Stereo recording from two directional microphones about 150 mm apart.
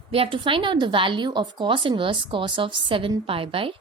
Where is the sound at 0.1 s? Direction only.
35° right (ahead or behind).